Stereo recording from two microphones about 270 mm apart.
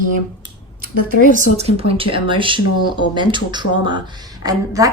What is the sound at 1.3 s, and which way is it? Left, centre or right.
A woman's voice, right.